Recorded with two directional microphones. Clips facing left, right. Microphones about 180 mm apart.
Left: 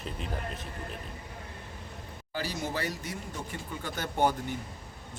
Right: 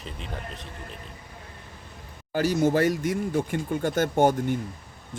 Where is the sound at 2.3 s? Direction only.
50° right (ahead or behind).